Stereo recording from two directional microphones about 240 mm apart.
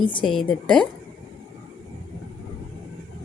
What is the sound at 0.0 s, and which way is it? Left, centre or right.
Speech, centre.